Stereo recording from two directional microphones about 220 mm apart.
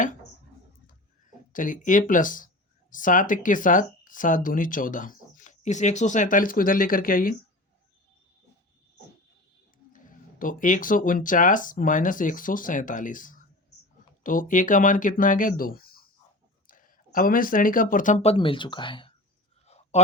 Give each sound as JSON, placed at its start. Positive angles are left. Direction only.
{"t": 1.5, "sound": "speech", "side_deg": 35}
{"t": 9.9, "sound": "speech", "side_deg": 35}
{"t": 19.6, "sound": "a sound", "side_deg": 30}